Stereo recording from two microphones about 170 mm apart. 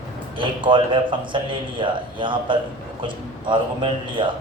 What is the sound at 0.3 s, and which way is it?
A man's voice, 30° right (ahead or behind).